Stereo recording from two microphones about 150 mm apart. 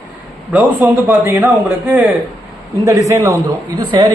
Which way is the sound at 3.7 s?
30° right (ahead or behind).